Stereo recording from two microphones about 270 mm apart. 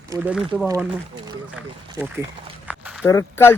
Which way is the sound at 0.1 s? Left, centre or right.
Centre.